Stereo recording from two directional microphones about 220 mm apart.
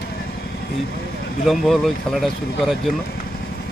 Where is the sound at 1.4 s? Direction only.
Centre (ahead or behind).